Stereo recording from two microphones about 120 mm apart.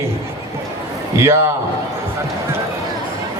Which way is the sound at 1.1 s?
25° right (ahead or behind).